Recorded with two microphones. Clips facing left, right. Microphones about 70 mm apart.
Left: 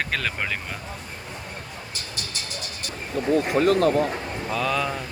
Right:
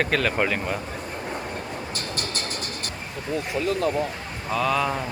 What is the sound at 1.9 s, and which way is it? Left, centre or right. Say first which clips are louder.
Music: right 5 dB; right.